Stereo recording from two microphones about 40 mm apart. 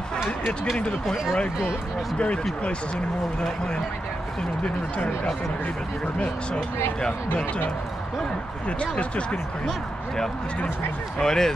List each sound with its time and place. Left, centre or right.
2.1 s speech: left
8.6 s speech: left
11.1 s speech: centre